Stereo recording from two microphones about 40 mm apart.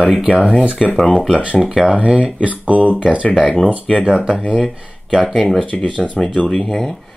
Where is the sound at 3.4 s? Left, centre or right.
Left.